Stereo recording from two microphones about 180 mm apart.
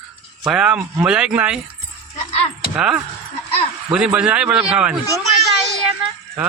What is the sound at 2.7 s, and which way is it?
Speech, 5° right (ahead or behind).